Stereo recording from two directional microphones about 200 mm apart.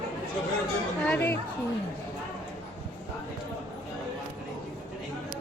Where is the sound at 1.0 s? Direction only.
10° left (ahead or behind).